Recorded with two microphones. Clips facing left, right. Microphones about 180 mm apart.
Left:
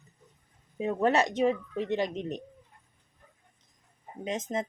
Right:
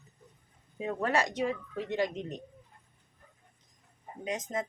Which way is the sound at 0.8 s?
20° left (ahead or behind).